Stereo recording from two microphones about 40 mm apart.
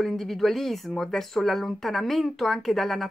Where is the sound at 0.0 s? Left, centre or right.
Centre.